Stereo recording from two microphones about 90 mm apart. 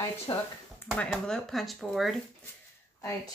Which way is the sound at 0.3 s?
55° left (ahead or behind).